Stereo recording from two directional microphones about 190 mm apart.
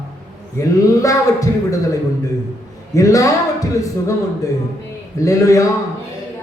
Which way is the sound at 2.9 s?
15° left (ahead or behind).